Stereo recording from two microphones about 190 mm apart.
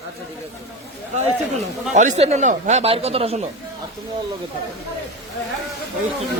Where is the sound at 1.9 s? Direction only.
35° right (ahead or behind).